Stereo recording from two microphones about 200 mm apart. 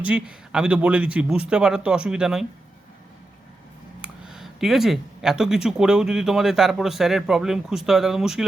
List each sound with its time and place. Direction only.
0.0 s speech: 5° right (ahead or behind)
4.0 s speech: 5° right (ahead or behind)